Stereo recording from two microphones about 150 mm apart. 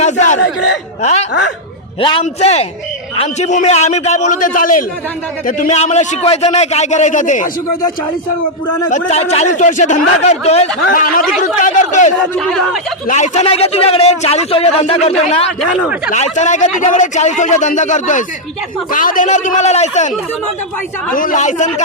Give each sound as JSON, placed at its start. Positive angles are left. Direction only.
{"t": 0.0, "sound": "a sound", "side_deg": 55}
{"t": 1.0, "sound": "speech", "side_deg": 50}
{"t": 2.0, "sound": "a man's voice", "side_deg": 35}
{"t": 5.7, "sound": "speech", "side_deg": 50}
{"t": 8.9, "sound": "speech", "side_deg": 50}
{"t": 10.9, "sound": "speech", "side_deg": 65}
{"t": 12.4, "sound": "speech", "side_deg": 0}
{"t": 13.1, "sound": "speech", "side_deg": 50}
{"t": 21.1, "sound": "speech", "side_deg": 65}